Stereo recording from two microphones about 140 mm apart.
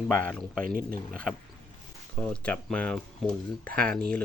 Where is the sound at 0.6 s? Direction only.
90° right.